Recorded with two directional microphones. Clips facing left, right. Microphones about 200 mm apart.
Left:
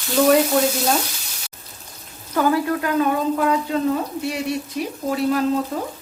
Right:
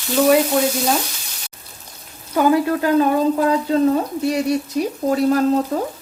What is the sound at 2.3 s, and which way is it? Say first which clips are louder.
Frying: right 3 dB; 15° right (ahead or behind).